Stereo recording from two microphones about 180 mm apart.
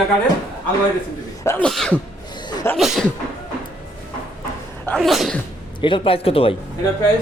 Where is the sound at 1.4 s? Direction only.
15° left (ahead or behind).